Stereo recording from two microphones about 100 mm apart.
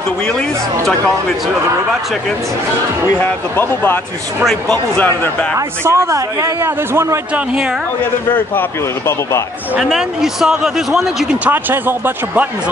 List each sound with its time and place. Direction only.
3.2 s speech: 15° left (ahead or behind)
4.5 s a man's voice: 5° left (ahead or behind)
5.0 s a man's voice: 20° left (ahead or behind)
5.9 s a man's voice: 30° right (ahead or behind)
8.0 s a man's voice: 20° left (ahead or behind)
9.8 s a man's voice: 5° right (ahead or behind)
11.4 s a man's voice: 20° right (ahead or behind)